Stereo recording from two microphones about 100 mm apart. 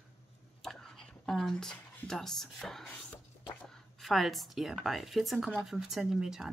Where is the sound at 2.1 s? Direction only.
5° left (ahead or behind).